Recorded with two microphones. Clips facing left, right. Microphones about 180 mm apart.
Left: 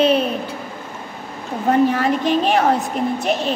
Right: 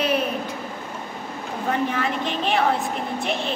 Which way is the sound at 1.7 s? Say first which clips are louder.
Left 8 dB; 40° left (ahead or behind).